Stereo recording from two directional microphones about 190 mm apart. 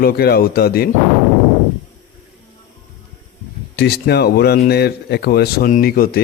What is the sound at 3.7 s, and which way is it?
Speech, 60° left (ahead or behind).